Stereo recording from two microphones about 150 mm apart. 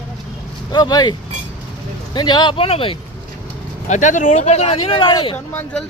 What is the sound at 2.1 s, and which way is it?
Speech, 30° left (ahead or behind).